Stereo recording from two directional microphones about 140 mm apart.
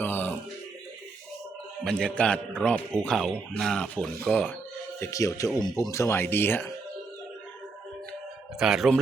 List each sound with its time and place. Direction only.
0.0 s a sound: 15° left (ahead or behind)
1.8 s a man's voice: 5° left (ahead or behind)
4.9 s speech: 25° left (ahead or behind)
8.5 s a man's voice: 5° right (ahead or behind)